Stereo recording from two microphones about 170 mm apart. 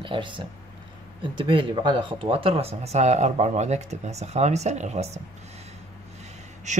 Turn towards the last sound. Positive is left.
turn(degrees=-45)  # may be behind; listen again after turning